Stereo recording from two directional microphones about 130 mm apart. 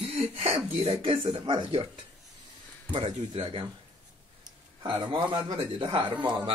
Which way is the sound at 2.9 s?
45° right (ahead or behind).